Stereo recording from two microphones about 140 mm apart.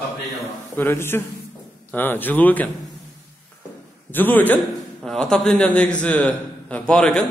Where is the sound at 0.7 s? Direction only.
15° left (ahead or behind).